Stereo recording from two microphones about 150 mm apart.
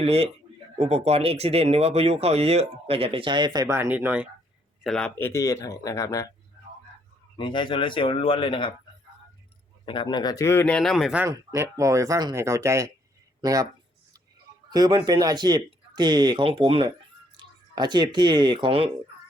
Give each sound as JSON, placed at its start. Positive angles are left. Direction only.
{"t": 0.0, "sound": "speech", "side_deg": -40}
{"t": 4.8, "sound": "speech", "side_deg": 5}
{"t": 7.3, "sound": "speech", "side_deg": 35}
{"t": 9.8, "sound": "a man's voice", "side_deg": 35}
{"t": 11.3, "sound": "speech", "side_deg": -20}
{"t": 14.7, "sound": "speech", "side_deg": -30}